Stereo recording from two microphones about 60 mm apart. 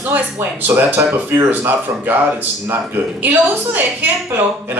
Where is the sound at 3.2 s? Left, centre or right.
Right.